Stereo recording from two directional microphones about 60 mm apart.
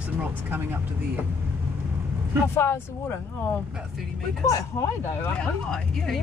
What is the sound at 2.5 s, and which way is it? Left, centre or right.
Speech, left.